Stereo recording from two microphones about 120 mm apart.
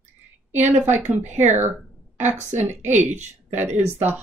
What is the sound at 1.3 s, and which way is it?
Speech, 80° right.